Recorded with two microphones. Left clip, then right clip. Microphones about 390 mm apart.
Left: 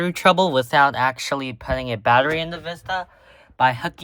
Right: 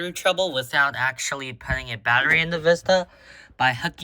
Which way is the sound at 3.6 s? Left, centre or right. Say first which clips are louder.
Left 3 dB; centre.